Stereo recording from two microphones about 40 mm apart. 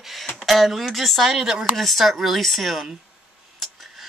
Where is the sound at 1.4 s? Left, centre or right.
Centre.